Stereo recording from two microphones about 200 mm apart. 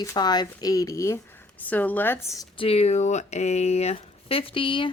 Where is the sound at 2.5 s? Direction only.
30° left (ahead or behind).